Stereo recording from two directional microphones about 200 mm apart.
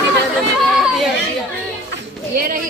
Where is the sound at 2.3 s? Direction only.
45° right (ahead or behind).